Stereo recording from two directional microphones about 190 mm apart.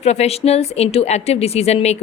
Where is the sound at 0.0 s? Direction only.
35° left (ahead or behind).